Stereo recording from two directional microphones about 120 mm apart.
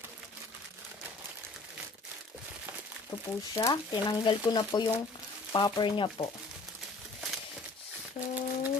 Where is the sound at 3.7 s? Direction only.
45° left (ahead or behind).